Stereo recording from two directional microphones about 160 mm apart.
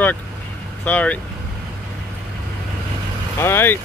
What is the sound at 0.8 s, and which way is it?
Speech, 10° left (ahead or behind).